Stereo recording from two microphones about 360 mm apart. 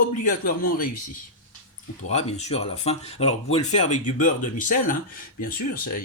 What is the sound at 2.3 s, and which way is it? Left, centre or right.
Speech, centre.